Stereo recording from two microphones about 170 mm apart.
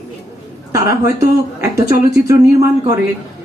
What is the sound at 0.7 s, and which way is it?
Speech, 20° right (ahead or behind).